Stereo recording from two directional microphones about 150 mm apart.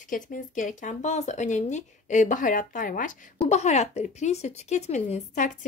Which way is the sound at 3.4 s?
50° left (ahead or behind).